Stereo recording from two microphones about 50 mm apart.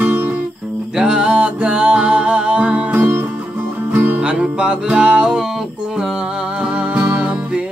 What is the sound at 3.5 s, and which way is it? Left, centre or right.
Music, right.